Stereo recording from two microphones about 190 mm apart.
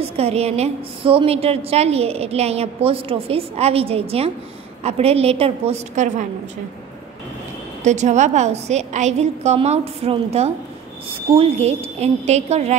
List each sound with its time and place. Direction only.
0.0 s a woman's voice: 35° right (ahead or behind)
7.8 s a woman's voice: 40° right (ahead or behind)